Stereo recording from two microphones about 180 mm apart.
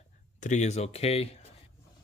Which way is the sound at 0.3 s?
40° left (ahead or behind).